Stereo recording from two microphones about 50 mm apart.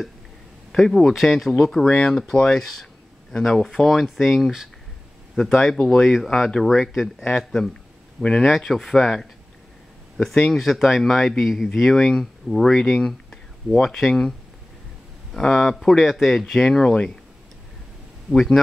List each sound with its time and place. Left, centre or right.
0.7 s speech: centre
2.6 s a sound: centre
3.3 s speech: centre
6.9 s speech: centre
7.2 s speech: centre
8.5 s speech: centre
15.3 s speech: centre
16.9 s speech: centre
18.3 s speech: centre